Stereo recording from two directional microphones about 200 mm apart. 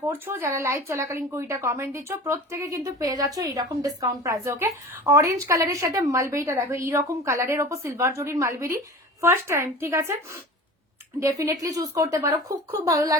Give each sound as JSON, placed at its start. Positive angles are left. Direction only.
{"t": 0.1, "sound": "speech", "side_deg": -10}